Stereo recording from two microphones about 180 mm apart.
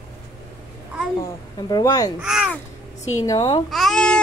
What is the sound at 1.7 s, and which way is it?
Speech, 20° left (ahead or behind).